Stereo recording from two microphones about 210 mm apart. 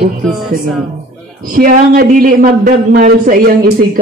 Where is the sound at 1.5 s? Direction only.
40° right (ahead or behind).